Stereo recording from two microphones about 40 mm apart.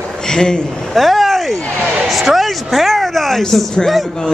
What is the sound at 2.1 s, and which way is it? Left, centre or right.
Speech, centre.